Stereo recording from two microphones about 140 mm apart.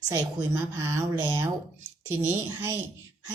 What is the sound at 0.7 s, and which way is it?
Speech, 20° right (ahead or behind).